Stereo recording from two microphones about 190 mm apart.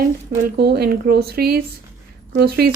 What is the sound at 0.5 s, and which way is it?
A woman's voice, 55° right (ahead or behind).